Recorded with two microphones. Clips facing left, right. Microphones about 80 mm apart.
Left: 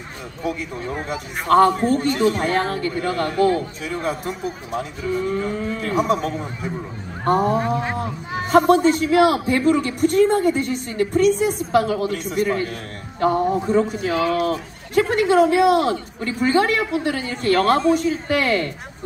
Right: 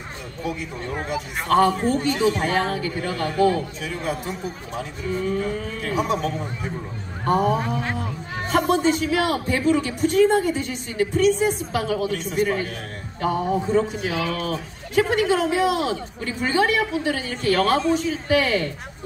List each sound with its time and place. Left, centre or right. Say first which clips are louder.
1.0 s a man's voice: even; left
7.8 s speech: left 3 dB; centre
8.5 s a man's voice: left 5 dB; left